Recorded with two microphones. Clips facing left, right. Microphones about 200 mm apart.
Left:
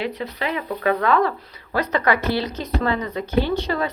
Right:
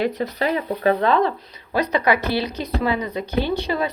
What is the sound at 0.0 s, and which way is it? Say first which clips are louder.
Speech: right 4 dB; 45° right (ahead or behind).